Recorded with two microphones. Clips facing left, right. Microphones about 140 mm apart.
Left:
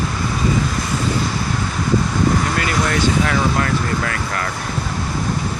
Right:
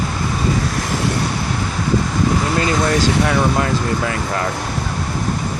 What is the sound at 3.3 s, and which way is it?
Speech, 20° right (ahead or behind).